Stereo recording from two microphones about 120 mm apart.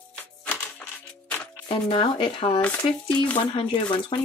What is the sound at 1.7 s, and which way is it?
Speech, 50° left (ahead or behind).